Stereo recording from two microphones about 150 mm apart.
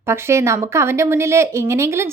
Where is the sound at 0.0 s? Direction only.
15° right (ahead or behind).